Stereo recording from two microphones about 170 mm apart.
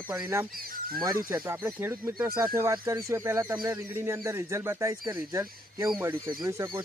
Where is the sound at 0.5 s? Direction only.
60° right (ahead or behind).